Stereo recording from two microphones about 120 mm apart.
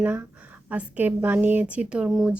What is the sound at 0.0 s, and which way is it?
A woman's voice, 20° right (ahead or behind).